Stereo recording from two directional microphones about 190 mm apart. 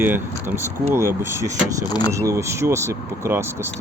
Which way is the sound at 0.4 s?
10° right (ahead or behind).